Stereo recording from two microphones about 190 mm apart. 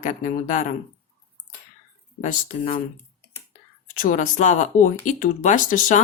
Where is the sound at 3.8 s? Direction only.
45° left (ahead or behind).